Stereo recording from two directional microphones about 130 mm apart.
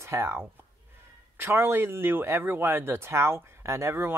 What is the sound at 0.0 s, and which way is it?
Speech, 20° right (ahead or behind).